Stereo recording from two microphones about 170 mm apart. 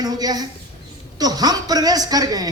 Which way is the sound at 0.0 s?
25° right (ahead or behind).